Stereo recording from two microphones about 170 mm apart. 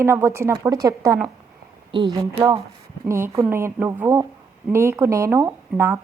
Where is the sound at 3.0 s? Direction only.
15° right (ahead or behind).